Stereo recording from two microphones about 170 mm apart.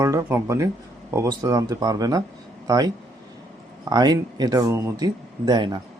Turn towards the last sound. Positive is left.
turn(degrees=-25)  # may be behind; listen again after turning